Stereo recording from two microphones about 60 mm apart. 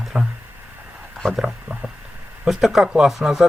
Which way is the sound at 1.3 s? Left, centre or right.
Centre.